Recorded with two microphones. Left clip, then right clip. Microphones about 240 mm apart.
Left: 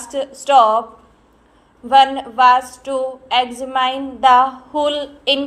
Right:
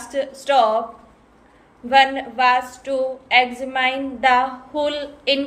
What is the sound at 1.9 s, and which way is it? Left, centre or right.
A woman's voice, centre.